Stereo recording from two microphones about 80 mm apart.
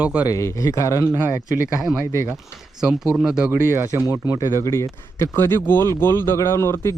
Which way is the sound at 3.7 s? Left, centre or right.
Right.